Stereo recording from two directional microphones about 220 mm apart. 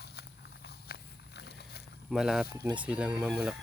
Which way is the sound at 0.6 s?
50° left (ahead or behind).